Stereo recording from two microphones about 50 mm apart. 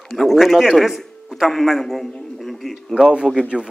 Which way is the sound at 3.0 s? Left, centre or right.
Centre.